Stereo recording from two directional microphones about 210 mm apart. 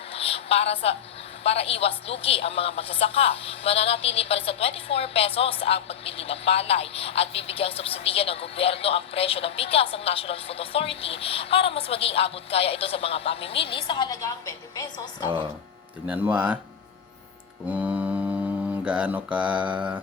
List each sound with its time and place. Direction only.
0.1 s a sound: 30° left (ahead or behind)
1.5 s a woman's voice: 30° left (ahead or behind)
16.0 s mantra: 10° right (ahead or behind)
17.7 s mantra: 5° right (ahead or behind)